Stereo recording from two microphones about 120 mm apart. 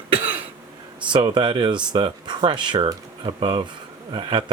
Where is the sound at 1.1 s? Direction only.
40° right (ahead or behind).